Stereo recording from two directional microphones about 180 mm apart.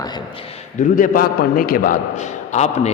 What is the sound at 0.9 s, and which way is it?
A man's voice, 50° left (ahead or behind).